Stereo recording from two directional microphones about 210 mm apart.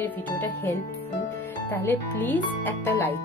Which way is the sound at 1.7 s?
10° left (ahead or behind).